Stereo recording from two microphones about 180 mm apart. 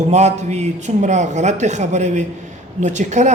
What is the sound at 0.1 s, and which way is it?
Speech, 40° right (ahead or behind).